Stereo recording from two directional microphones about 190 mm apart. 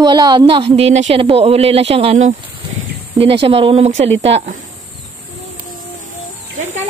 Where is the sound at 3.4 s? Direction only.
30° right (ahead or behind).